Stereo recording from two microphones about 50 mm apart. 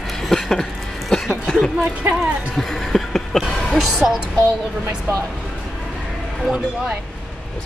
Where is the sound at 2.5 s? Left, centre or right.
Centre.